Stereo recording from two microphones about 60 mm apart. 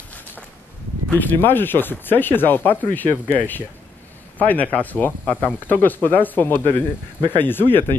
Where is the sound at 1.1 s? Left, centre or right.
Left.